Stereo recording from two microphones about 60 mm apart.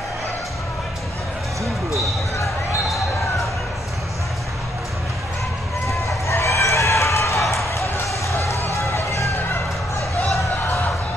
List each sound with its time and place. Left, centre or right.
5.9 s chicken: left
7.7 s basketball bounce: left
8.2 s run: left
8.7 s music: left